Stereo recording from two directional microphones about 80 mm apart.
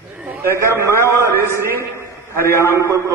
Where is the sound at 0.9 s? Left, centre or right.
Left.